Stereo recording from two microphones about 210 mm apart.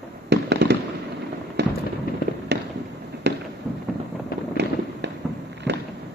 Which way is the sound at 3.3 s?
55° right (ahead or behind).